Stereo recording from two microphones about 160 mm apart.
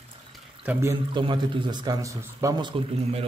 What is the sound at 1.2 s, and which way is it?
A man's voice, 30° right (ahead or behind).